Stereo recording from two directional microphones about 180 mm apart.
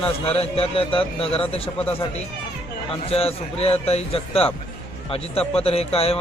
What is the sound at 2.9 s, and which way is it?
Speech, 35° left (ahead or behind).